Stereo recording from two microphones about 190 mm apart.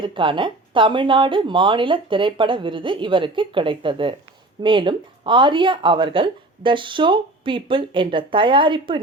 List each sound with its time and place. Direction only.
0.0 s speech: 25° right (ahead or behind)